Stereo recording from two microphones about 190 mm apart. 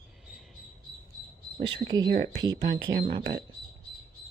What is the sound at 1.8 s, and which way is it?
Speech, 20° right (ahead or behind).